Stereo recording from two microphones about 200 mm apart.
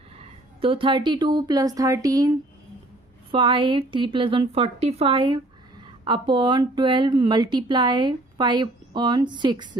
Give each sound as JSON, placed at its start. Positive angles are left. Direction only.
{"t": 0.2, "sound": "a woman's voice", "side_deg": -25}
{"t": 3.3, "sound": "speech", "side_deg": -25}